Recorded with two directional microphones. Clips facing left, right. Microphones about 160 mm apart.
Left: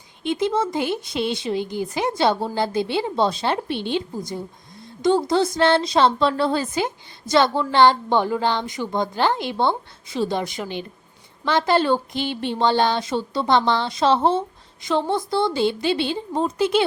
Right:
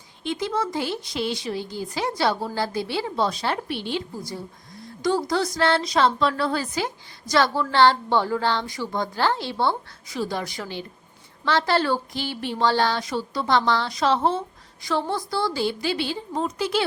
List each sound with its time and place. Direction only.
0.2 s a woman's voice: 20° left (ahead or behind)